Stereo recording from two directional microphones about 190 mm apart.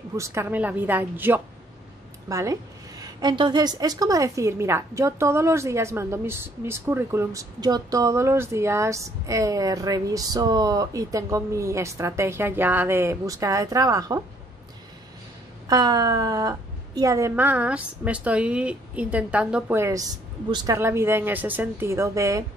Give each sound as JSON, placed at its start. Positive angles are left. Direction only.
{"t": 0.2, "sound": "a woman's voice", "side_deg": -15}
{"t": 15.7, "sound": "a woman's voice", "side_deg": -20}